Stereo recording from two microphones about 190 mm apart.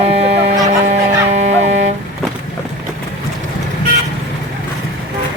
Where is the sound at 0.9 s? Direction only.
35° right (ahead or behind).